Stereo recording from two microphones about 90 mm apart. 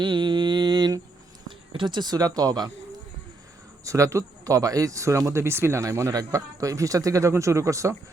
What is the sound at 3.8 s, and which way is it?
Speech, 35° right (ahead or behind).